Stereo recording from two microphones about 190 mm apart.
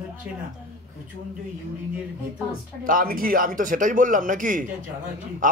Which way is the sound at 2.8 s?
45° right (ahead or behind).